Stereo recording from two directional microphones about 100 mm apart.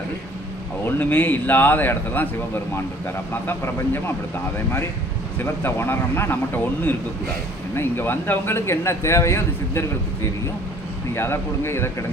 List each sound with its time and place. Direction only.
0.9 s a man's voice: 20° left (ahead or behind)
3.4 s a man's voice: 20° left (ahead or behind)
5.4 s a man's voice: 25° left (ahead or behind)
11.1 s a man's voice: 25° left (ahead or behind)